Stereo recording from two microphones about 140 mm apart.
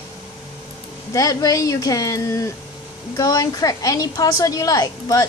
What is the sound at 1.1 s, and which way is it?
A woman's voice, 25° left (ahead or behind).